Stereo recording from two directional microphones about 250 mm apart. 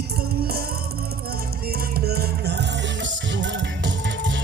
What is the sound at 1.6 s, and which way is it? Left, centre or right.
Music, right.